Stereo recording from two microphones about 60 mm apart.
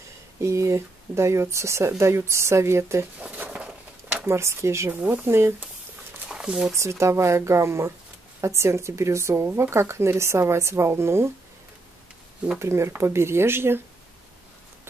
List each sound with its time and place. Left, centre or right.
0.4 s speech: right
3.2 s a sound: right
4.3 s speech: right
5.0 s speech: right
6.2 s a sound: centre
6.7 s speech: right
12.5 s speech: right